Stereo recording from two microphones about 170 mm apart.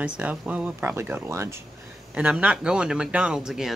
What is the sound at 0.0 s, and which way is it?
Speech, 10° right (ahead or behind).